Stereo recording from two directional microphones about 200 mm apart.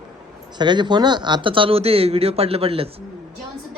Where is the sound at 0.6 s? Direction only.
20° right (ahead or behind).